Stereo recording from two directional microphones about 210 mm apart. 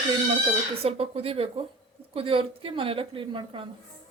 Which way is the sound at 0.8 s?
30° right (ahead or behind).